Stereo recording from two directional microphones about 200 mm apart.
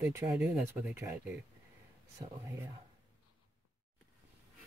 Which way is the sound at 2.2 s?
25° right (ahead or behind).